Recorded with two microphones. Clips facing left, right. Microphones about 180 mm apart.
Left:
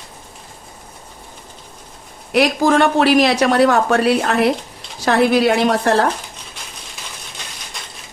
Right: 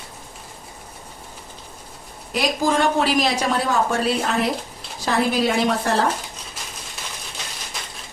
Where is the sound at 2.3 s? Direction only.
65° left (ahead or behind).